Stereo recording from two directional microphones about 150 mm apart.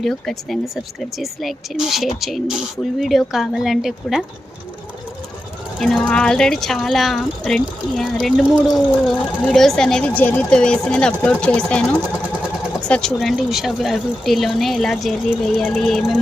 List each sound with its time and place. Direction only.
0.0 s speech: centre (ahead or behind)
5.8 s speech: 5° left (ahead or behind)